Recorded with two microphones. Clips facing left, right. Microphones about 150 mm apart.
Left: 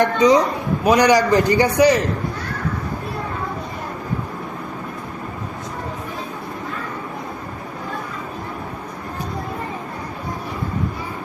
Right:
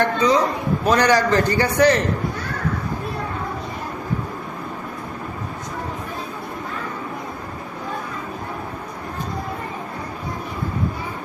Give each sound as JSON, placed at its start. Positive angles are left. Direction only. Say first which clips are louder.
{"t": 0.0, "sound": "a man's voice", "louder": "left 3 dB", "side_deg": 15}